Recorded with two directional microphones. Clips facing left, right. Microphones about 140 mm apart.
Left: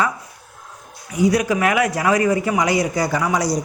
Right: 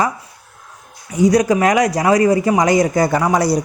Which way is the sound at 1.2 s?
40° right (ahead or behind).